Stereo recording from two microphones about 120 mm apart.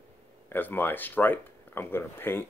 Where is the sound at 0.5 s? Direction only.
15° left (ahead or behind).